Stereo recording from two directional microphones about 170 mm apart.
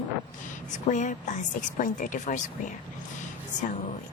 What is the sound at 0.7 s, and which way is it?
Speech, 45° left (ahead or behind).